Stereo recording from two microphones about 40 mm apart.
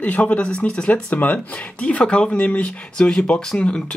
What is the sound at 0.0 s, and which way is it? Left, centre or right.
A man's voice, left.